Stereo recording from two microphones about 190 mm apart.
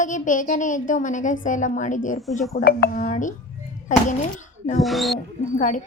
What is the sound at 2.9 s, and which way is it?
Speech, 40° left (ahead or behind).